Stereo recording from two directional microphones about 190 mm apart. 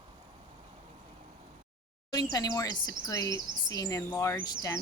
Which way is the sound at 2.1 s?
20° left (ahead or behind).